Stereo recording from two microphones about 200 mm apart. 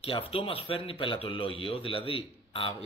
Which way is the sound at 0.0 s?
25° left (ahead or behind).